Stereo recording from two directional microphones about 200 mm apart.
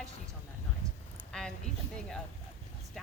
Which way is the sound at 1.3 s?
5° left (ahead or behind).